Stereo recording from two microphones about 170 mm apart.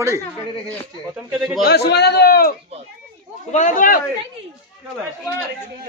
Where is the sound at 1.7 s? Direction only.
75° left (ahead or behind).